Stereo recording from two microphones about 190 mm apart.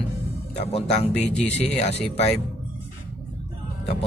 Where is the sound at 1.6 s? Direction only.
30° left (ahead or behind).